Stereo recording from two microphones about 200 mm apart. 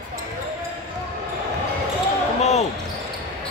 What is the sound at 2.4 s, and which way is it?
Basketball bounce, 35° left (ahead or behind).